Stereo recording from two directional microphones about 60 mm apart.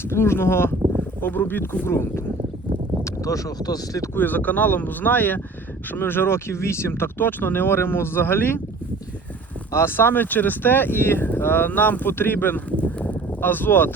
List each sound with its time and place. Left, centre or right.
0.1 s speech: left
1.9 s speech: left
3.0 s speech: left
4.1 s speech: left
9.7 s speech: left